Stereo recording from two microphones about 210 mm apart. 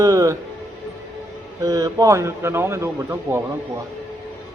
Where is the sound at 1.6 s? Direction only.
15° right (ahead or behind).